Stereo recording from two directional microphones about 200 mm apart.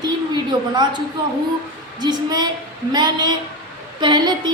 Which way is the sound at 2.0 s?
20° right (ahead or behind).